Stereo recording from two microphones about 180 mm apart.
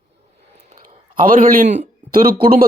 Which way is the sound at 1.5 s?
40° right (ahead or behind).